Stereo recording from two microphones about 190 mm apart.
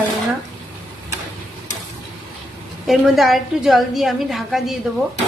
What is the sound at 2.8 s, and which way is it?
A woman's voice, centre (ahead or behind).